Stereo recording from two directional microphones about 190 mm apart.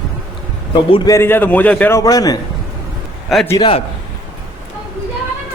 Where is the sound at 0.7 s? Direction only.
25° left (ahead or behind).